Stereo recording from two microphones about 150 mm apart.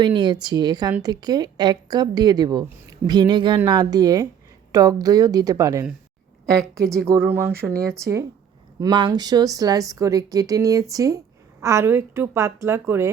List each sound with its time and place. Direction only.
0.0 s a woman's voice: 30° right (ahead or behind)
6.4 s a woman's voice: 5° left (ahead or behind)
6.8 s a woman's voice: 20° right (ahead or behind)
8.8 s a woman's voice: 30° right (ahead or behind)